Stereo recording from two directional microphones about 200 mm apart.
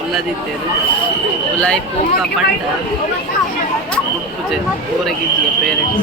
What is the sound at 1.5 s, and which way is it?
Speech, 5° left (ahead or behind).